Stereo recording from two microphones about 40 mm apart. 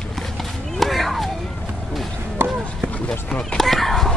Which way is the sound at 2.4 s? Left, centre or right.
Right.